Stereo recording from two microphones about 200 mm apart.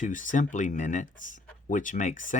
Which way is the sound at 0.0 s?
40° left (ahead or behind).